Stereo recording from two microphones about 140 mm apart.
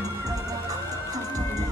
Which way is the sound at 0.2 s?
25° right (ahead or behind).